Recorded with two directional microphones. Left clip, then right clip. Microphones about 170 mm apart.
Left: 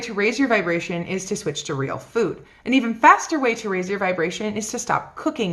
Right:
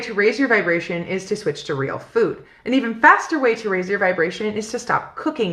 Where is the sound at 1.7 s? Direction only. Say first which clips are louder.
Right 2 dB; 35° left (ahead or behind).